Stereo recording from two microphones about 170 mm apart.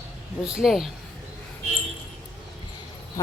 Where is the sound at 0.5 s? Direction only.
Centre (ahead or behind).